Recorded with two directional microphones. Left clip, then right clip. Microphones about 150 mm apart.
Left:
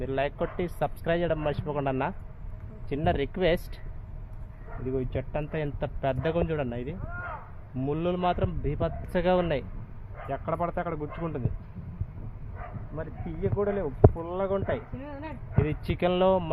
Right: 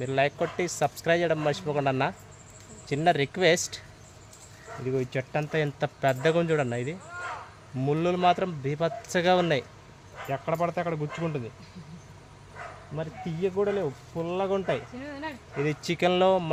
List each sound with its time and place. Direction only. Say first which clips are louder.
0.0 s speech: right 3 dB; 25° right (ahead or behind)
4.9 s speech: right 2 dB; 30° right (ahead or behind)
13.0 s speech: right 3 dB; 30° right (ahead or behind)